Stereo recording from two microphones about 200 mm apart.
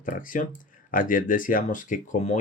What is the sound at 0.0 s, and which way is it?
Speech, 45° left (ahead or behind).